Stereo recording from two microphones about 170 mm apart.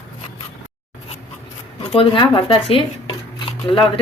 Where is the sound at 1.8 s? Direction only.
35° left (ahead or behind).